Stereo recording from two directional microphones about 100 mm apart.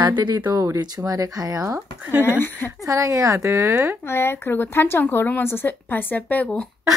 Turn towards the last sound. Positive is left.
turn(degrees=15)  # may be behind; listen again after turning